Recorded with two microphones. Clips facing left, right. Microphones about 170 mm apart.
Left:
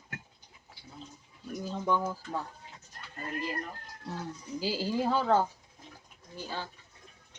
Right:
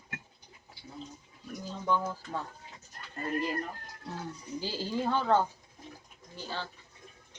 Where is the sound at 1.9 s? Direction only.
10° left (ahead or behind).